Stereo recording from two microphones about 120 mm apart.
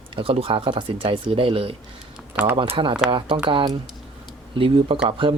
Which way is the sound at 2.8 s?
45° right (ahead or behind).